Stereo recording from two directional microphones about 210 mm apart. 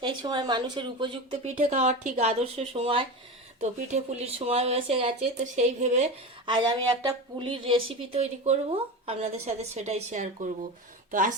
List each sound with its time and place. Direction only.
0.0 s speech: 20° right (ahead or behind)